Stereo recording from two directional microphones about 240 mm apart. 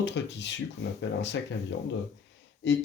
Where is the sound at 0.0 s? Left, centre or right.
Left.